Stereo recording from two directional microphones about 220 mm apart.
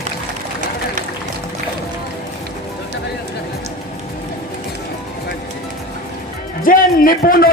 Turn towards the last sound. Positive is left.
turn(degrees=40)  # may be behind; listen again after turning